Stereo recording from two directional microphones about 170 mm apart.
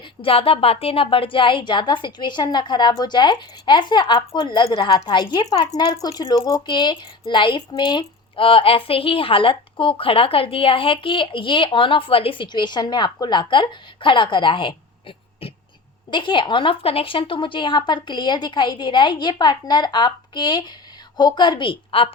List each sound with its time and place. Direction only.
0.2 s a woman's voice: 35° left (ahead or behind)